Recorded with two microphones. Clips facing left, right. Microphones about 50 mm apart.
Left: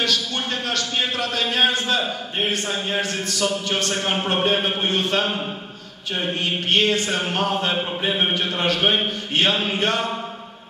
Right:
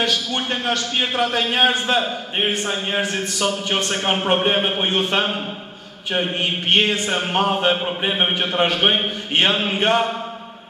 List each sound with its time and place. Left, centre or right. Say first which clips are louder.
0.0 s a man's voice: right 2 dB; right